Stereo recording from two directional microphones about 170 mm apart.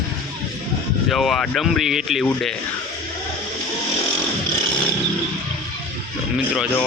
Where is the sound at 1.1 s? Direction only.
Centre (ahead or behind).